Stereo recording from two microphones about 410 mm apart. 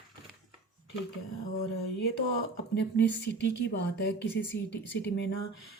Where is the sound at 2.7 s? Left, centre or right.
Left.